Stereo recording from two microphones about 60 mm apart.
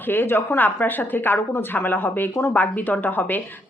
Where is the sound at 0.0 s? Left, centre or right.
Left.